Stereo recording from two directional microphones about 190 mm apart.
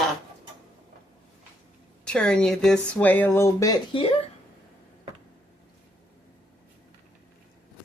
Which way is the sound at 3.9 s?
30° left (ahead or behind).